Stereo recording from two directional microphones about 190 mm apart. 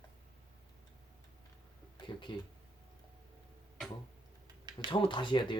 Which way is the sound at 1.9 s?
25° left (ahead or behind).